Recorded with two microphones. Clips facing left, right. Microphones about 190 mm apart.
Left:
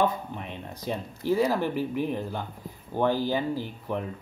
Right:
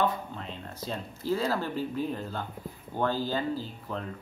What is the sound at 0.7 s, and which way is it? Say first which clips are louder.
Speech: left 5 dB; 15° left (ahead or behind).